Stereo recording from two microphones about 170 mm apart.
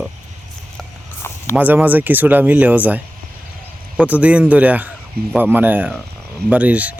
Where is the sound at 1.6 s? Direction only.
10° right (ahead or behind).